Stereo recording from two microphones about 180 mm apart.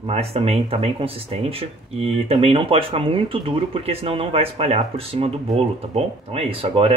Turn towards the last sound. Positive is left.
turn(degrees=-30)  # may be behind; listen again after turning